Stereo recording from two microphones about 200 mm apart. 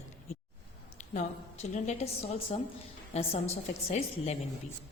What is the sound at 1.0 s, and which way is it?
A woman's voice, 35° left (ahead or behind).